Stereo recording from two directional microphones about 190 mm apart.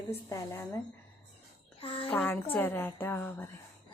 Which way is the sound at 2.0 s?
10° left (ahead or behind).